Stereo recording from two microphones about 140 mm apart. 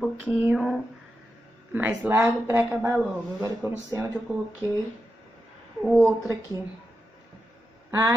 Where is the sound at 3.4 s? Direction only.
20° right (ahead or behind).